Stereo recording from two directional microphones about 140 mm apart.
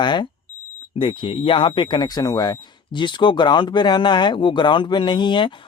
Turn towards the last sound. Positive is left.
turn(degrees=35)  # may be behind; listen again after turning